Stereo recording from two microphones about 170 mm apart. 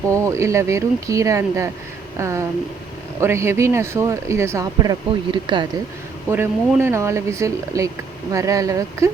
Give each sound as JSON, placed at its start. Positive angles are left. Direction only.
{"t": 0.1, "sound": "speech", "side_deg": -15}
{"t": 6.3, "sound": "speech", "side_deg": -15}